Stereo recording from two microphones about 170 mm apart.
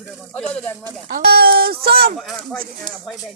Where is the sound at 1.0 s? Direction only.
65° right (ahead or behind).